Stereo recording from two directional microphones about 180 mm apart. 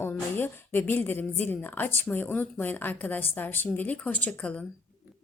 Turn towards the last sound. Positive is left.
turn(degrees=5)  # may be behind; listen again after turning